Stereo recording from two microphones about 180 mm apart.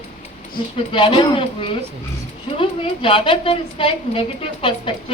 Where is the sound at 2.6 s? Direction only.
30° left (ahead or behind).